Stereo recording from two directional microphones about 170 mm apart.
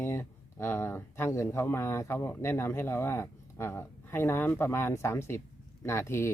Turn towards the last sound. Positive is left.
turn(degrees=15)  # may be behind; listen again after turning